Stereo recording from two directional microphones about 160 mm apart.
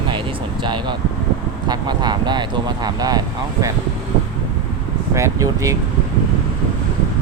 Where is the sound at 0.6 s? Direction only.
30° right (ahead or behind).